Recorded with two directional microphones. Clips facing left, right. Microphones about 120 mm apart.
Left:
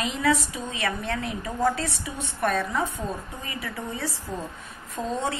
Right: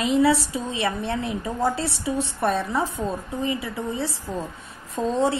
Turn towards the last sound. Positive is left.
turn(degrees=-30)  # may be behind; listen again after turning